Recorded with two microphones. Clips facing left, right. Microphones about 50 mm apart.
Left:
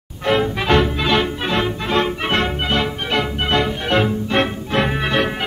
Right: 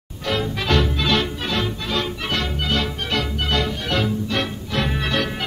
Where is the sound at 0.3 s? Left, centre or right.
Left.